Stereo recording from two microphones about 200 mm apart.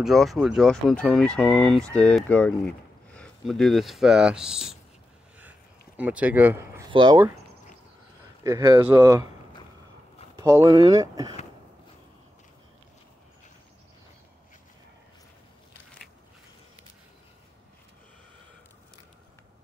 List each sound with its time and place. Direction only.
0.0 s speech: centre (ahead or behind)
5.9 s speech: 10° right (ahead or behind)
6.9 s speech: 25° right (ahead or behind)
8.5 s speech: 15° right (ahead or behind)
10.3 s speech: 15° right (ahead or behind)